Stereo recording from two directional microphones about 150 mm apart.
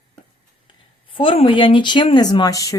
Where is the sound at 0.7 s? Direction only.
35° left (ahead or behind).